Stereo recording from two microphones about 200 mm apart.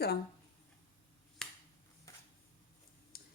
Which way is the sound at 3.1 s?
50° left (ahead or behind).